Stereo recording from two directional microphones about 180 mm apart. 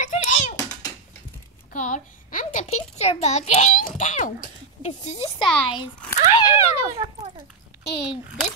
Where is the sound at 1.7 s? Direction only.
45° left (ahead or behind).